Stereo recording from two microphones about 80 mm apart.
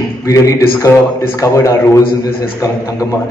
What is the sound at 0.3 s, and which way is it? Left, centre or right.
A man's voice, left.